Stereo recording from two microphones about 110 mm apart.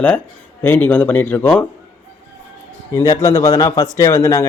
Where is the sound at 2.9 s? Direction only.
30° left (ahead or behind).